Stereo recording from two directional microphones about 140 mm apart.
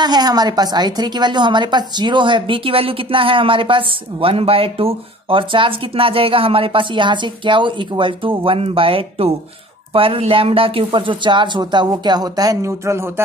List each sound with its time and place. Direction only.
0.0 s speech: 30° right (ahead or behind)